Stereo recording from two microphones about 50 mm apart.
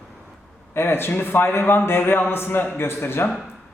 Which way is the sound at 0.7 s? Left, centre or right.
Left.